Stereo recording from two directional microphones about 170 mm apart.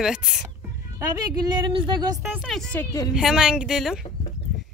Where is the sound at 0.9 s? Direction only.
25° right (ahead or behind).